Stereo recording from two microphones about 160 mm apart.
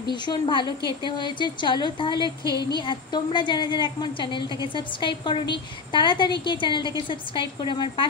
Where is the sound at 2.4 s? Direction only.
20° right (ahead or behind).